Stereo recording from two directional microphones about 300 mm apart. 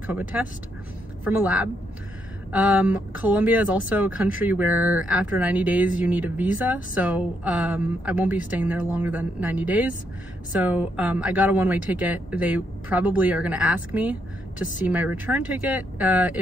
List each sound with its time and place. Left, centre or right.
0.3 s speech: centre